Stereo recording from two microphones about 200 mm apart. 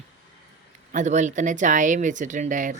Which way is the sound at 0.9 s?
35° right (ahead or behind).